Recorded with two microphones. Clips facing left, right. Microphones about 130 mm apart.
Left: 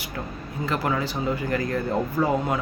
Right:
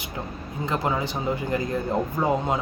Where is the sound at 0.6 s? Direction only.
20° right (ahead or behind).